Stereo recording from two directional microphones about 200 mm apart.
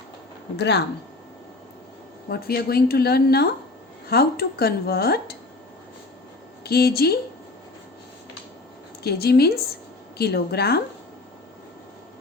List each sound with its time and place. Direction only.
0.5 s speech: 60° left (ahead or behind)
2.3 s speech: 50° left (ahead or behind)
6.7 s speech: 50° left (ahead or behind)
9.0 s speech: 50° left (ahead or behind)